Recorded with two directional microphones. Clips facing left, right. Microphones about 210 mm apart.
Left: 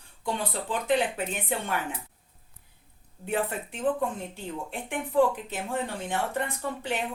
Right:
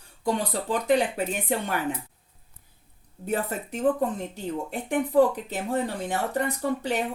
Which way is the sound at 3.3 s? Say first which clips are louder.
Right 1 dB; 40° right (ahead or behind).